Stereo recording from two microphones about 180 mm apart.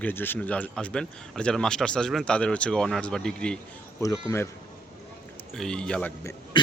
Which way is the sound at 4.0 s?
20° left (ahead or behind).